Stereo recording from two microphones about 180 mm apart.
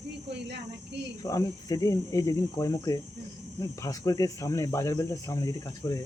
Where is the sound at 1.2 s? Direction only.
20° left (ahead or behind).